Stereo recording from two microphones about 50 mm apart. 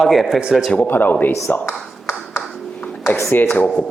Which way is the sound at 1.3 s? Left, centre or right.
Left.